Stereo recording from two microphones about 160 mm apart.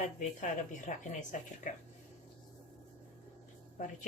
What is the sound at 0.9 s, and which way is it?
Speech, 50° left (ahead or behind).